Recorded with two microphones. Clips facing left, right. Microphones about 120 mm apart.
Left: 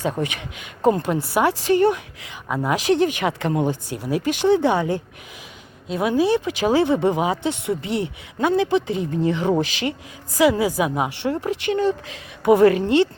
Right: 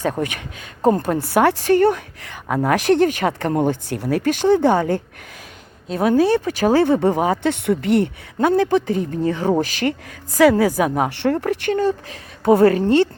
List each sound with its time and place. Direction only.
0.0 s a woman's voice: 45° right (ahead or behind)
7.4 s a woman's voice: 60° right (ahead or behind); by 13.1 s 40° right (ahead or behind)